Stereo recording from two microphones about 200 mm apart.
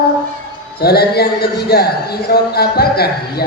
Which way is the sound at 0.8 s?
50° left (ahead or behind).